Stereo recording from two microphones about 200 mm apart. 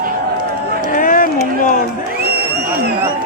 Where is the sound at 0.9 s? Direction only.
45° left (ahead or behind).